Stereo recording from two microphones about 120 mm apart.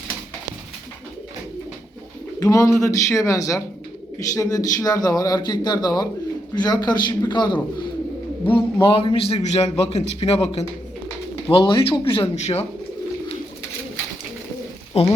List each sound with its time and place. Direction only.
2.4 s a man's voice: 25° left (ahead or behind); by 12.3 s 45° left (ahead or behind)
12.4 s speech: 60° left (ahead or behind)
14.9 s speech: 60° left (ahead or behind)